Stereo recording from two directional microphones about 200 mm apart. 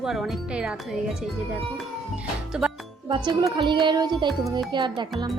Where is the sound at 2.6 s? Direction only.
5° right (ahead or behind).